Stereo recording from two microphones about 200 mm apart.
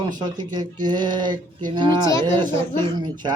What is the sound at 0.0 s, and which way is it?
Speech, 20° right (ahead or behind).